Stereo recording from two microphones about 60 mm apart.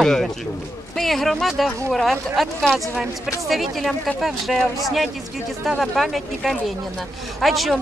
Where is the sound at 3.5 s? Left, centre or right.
Centre.